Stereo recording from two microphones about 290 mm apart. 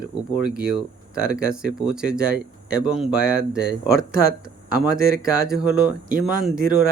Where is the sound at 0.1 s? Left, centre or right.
Centre.